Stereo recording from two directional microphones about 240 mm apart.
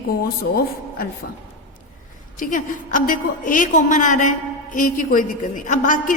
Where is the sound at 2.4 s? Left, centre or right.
Left.